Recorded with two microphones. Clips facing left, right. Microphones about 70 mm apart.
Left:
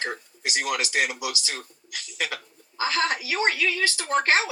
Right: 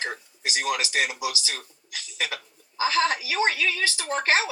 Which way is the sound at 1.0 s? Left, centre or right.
Right.